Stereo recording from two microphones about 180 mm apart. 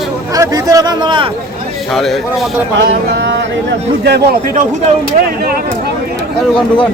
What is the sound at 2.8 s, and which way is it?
Speech, 75° right (ahead or behind).